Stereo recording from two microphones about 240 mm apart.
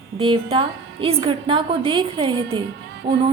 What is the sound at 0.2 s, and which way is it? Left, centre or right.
A woman's voice, centre.